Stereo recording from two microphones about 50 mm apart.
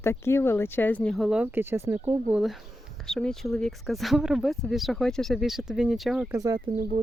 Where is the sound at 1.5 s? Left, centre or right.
Right.